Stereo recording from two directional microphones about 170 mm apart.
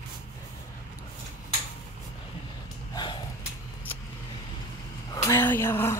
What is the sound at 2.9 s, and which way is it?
Snort, 25° left (ahead or behind).